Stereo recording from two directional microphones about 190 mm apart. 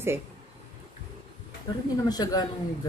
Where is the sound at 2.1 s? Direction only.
20° left (ahead or behind).